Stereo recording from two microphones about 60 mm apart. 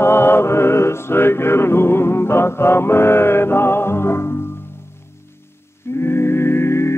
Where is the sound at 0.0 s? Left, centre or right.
Left.